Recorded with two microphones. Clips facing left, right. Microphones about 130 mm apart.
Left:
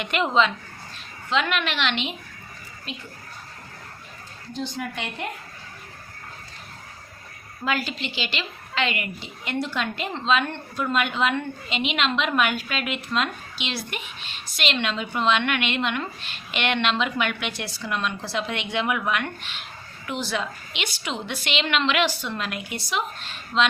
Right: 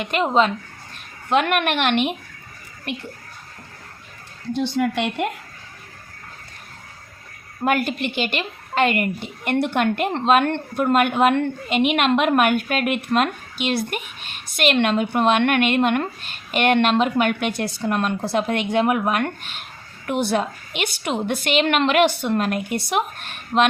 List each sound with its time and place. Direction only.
0.0 s speech: 35° right (ahead or behind)
1.3 s a woman's voice: 55° right (ahead or behind)
2.9 s a woman's voice: 65° right (ahead or behind)
4.5 s a woman's voice: 70° right (ahead or behind)
7.6 s a woman's voice: 55° right (ahead or behind)